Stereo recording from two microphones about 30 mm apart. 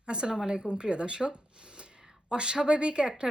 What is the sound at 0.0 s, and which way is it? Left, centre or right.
Speech, right.